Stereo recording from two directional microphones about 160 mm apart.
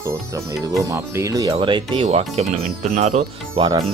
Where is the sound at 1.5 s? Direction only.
30° right (ahead or behind); by 3.6 s 60° right (ahead or behind).